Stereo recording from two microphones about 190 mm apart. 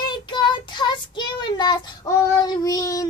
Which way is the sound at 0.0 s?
25° left (ahead or behind).